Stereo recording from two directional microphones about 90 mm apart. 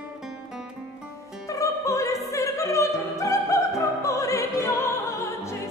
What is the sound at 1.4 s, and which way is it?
Music, 35° left (ahead or behind).